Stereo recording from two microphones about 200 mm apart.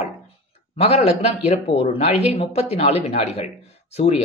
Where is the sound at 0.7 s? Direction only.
30° left (ahead or behind).